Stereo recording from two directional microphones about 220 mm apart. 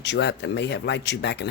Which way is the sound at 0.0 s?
50° left (ahead or behind).